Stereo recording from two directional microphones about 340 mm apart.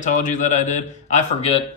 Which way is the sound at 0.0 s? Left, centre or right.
Left.